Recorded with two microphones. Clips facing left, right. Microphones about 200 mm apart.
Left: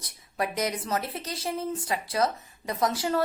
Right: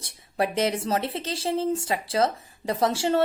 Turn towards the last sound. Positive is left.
turn(degrees=-30)  # may be behind; listen again after turning